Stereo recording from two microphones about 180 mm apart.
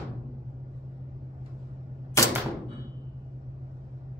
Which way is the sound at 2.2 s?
20° left (ahead or behind).